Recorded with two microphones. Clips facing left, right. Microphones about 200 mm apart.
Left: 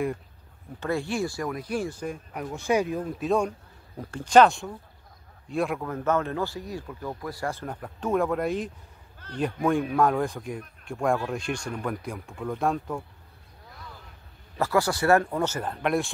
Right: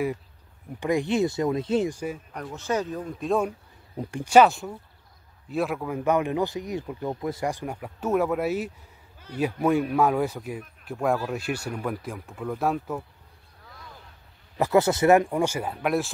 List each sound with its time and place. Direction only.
0.7 s speech: 15° right (ahead or behind)
2.3 s speech: 10° left (ahead or behind)
3.9 s speech: 15° right (ahead or behind)
14.6 s speech: 20° right (ahead or behind); by 16.1 s 5° right (ahead or behind)